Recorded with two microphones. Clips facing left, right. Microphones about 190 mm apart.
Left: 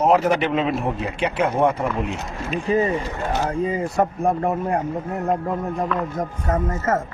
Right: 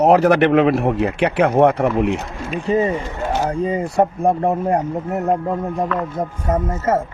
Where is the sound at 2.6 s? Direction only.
35° right (ahead or behind).